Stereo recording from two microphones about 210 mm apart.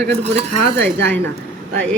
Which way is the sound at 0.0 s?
55° right (ahead or behind).